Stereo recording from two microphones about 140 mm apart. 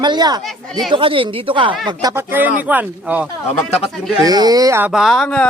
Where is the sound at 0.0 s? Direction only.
30° right (ahead or behind).